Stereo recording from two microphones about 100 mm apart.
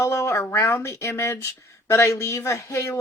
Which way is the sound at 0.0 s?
30° left (ahead or behind).